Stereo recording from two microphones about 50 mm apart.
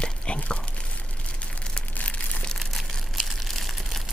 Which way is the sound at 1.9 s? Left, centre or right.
Left.